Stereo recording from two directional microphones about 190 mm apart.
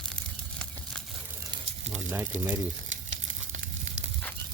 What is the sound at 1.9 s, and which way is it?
Sizzle, 10° right (ahead or behind).